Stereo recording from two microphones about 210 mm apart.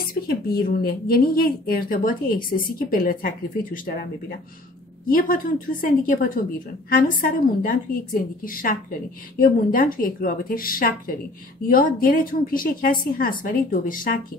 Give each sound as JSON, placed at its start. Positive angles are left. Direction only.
{"t": 0.1, "sound": "speech", "side_deg": 45}
{"t": 5.0, "sound": "a woman's voice", "side_deg": 40}